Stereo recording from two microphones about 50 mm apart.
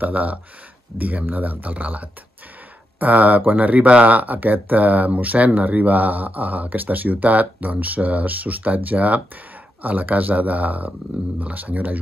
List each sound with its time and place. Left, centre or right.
0.0 s speech: right